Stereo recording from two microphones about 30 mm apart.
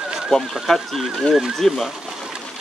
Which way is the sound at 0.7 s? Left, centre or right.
Centre.